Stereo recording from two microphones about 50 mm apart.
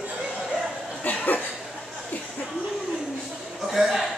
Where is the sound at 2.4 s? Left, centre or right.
Centre.